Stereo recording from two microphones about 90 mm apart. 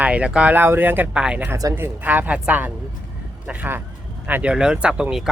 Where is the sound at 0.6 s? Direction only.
25° right (ahead or behind).